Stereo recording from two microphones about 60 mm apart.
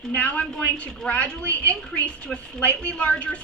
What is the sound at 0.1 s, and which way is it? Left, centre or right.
Speech, left.